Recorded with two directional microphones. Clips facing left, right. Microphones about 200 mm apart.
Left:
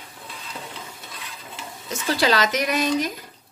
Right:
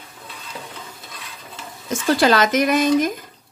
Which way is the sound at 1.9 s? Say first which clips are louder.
Right 5 dB; 50° right (ahead or behind).